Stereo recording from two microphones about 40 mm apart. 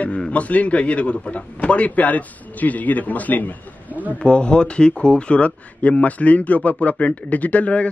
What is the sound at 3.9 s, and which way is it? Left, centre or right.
Speech, right.